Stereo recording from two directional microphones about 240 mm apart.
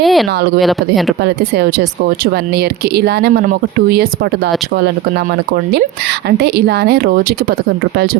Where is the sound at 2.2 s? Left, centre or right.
Right.